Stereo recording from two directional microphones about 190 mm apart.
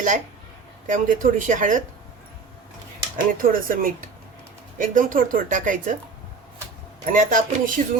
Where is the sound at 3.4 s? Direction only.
45° right (ahead or behind).